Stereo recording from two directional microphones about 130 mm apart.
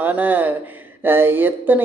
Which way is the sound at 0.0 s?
15° right (ahead or behind).